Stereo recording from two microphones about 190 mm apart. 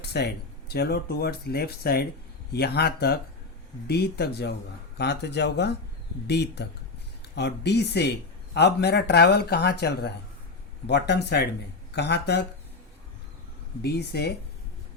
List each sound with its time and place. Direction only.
0.0 s speech: 60° left (ahead or behind)
13.8 s speech: 60° left (ahead or behind)